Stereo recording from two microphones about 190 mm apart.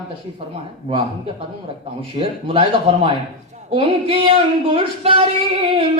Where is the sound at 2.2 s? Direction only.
30° right (ahead or behind).